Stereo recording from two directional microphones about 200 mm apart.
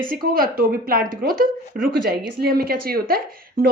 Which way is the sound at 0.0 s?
45° right (ahead or behind).